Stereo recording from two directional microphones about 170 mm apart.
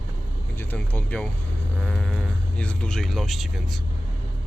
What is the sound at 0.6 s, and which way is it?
Speech, 10° left (ahead or behind).